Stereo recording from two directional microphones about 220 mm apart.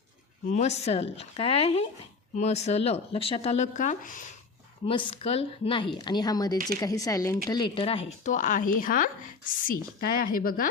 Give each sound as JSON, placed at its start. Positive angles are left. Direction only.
{"t": 0.4, "sound": "speech", "side_deg": 30}
{"t": 4.9, "sound": "speech", "side_deg": 25}